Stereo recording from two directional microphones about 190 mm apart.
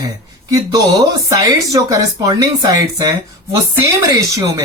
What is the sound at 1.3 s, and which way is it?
Speech, 15° right (ahead or behind).